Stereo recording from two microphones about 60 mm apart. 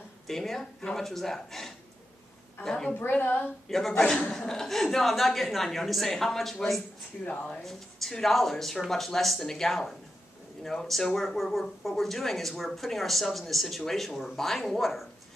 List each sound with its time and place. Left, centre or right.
0.3 s speech: centre
2.9 s a woman's voice: left
3.6 s speech: centre
7.2 s speech: left
7.6 s speech: centre